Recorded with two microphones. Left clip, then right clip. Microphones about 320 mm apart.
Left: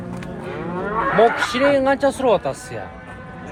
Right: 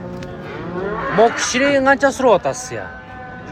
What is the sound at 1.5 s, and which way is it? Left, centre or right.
Speech, centre.